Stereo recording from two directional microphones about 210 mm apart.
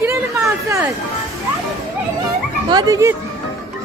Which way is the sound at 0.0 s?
10° right (ahead or behind).